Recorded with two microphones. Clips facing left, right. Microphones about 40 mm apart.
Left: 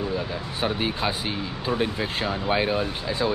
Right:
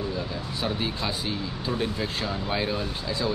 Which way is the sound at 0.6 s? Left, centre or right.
Left.